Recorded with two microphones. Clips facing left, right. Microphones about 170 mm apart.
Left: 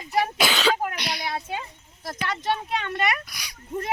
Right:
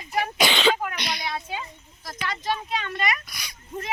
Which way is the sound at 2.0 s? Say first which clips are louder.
Left 2 dB; 65° left (ahead or behind).